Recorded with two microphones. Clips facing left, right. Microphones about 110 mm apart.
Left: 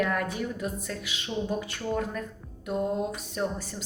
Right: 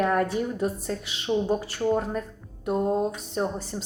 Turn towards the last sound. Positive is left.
turn(degrees=-30)  # may be behind; listen again after turning